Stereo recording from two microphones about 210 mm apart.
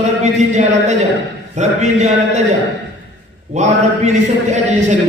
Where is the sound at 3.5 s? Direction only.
35° right (ahead or behind).